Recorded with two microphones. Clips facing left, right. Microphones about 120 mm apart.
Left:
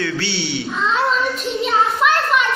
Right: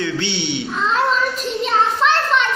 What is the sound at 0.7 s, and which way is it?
Child singing, centre (ahead or behind).